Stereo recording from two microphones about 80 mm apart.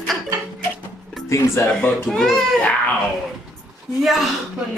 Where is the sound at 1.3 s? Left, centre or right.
Left.